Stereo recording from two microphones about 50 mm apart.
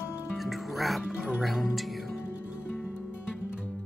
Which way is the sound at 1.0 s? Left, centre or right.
Right.